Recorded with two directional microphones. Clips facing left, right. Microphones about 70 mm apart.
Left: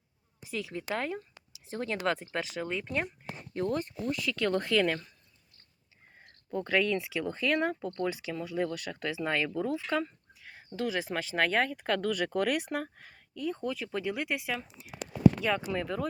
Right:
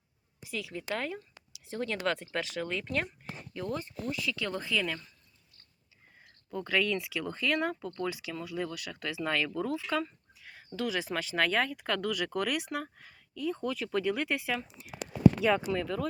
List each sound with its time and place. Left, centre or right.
0.5 s speech: left
3.5 s speech: left
6.5 s speech: left
9.6 s a sound: left
10.8 s speech: left; by 14.8 s centre
15.4 s speech: centre
15.6 s speech: centre